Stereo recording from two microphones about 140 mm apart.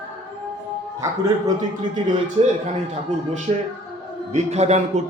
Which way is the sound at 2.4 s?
40° right (ahead or behind).